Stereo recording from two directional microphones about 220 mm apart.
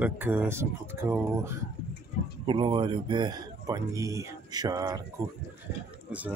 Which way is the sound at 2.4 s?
20° right (ahead or behind).